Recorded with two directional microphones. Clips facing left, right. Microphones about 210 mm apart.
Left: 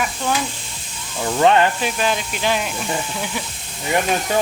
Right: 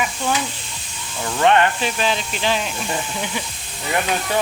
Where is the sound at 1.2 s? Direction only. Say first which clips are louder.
Left 1 dB; 25° left (ahead or behind).